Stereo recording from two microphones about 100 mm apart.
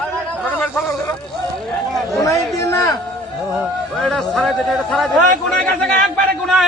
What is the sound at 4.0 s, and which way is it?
A man's voice, 5° left (ahead or behind).